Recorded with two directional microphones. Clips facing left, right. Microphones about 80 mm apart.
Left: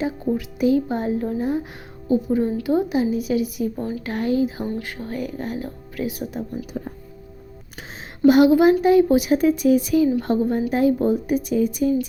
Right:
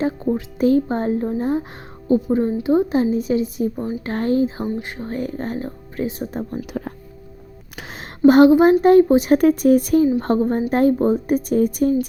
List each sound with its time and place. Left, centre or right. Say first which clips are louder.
0.3 s speech: right 2 dB; right
3.8 s speech: right 2 dB; right
4.1 s speech: right 2 dB; right
4.6 s speech: right 2 dB; right
8.3 s speech: right 3 dB; right
9.0 s speech: right 2 dB; right
9.3 s speech: right 3 dB; right
10.9 s speech: right 2 dB; right